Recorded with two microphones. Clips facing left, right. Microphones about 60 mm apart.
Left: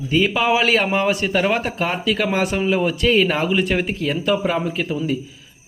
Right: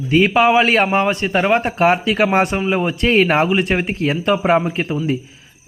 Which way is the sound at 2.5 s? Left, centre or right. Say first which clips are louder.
Right 1 dB; right.